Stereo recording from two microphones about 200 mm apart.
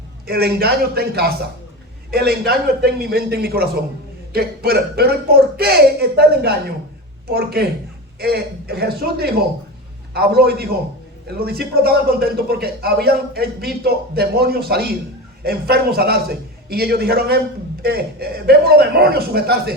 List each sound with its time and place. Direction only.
0.3 s a man's voice: 50° right (ahead or behind)